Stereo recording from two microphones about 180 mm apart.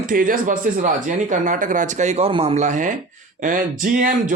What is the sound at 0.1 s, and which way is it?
Speech, 50° right (ahead or behind).